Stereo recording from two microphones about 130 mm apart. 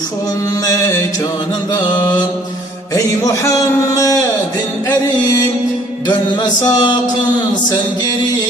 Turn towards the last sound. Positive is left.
turn(degrees=30)  # may be behind; listen again after turning